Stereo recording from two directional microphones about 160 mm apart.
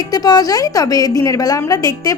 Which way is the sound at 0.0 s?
25° left (ahead or behind).